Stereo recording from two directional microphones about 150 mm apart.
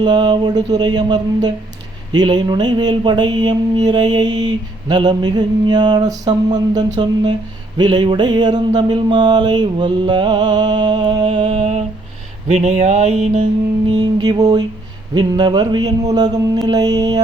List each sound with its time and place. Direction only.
0.0 s mantra: 30° right (ahead or behind)
12.5 s a sound: 50° right (ahead or behind)
13.9 s mantra: 30° right (ahead or behind)